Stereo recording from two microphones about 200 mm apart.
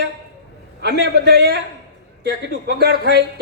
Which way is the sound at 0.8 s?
55° right (ahead or behind).